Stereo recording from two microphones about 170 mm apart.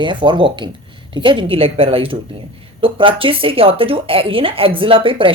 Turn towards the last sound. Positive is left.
turn(degrees=-30)  # may be behind; listen again after turning